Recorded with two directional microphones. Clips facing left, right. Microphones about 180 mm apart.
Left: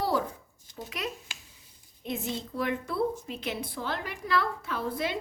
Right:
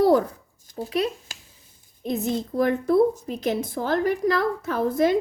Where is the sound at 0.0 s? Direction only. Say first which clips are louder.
Right 11 dB; 50° right (ahead or behind).